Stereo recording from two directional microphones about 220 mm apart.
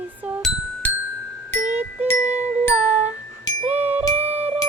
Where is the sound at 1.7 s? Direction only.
10° right (ahead or behind).